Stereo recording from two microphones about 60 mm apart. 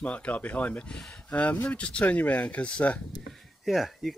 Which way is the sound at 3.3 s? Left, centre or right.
Centre.